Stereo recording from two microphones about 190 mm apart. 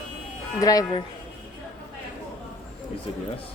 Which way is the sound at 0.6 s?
20° left (ahead or behind).